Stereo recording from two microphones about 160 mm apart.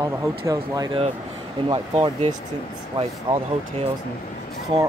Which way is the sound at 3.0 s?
35° right (ahead or behind).